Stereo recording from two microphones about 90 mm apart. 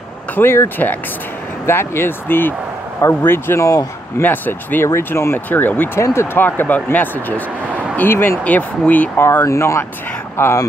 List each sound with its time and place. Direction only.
0.4 s speech: 25° left (ahead or behind)
4.2 s speech: 20° left (ahead or behind)
5.9 s speech: 30° left (ahead or behind)
9.2 s speech: 30° left (ahead or behind)